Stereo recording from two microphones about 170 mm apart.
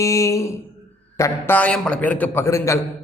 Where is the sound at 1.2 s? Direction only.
15° left (ahead or behind).